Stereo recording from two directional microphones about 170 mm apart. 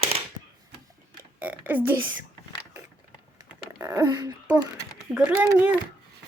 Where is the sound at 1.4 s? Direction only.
10° right (ahead or behind).